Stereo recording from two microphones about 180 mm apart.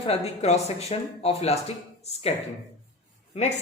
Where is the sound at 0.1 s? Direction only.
35° left (ahead or behind).